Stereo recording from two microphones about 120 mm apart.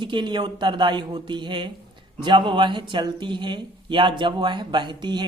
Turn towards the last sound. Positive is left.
turn(degrees=-40)  # may be behind; listen again after turning